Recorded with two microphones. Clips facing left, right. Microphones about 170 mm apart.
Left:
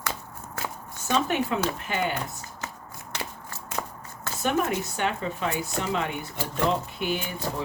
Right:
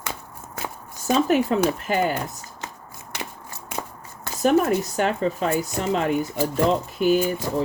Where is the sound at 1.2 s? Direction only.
40° right (ahead or behind).